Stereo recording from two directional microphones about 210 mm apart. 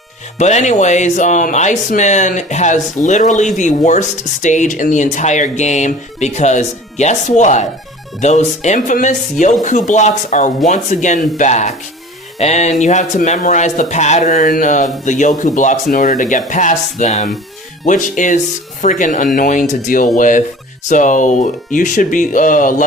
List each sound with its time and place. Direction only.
0.3 s speech: 35° left (ahead or behind)